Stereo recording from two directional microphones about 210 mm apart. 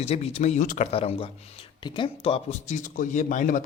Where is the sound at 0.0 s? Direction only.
30° left (ahead or behind).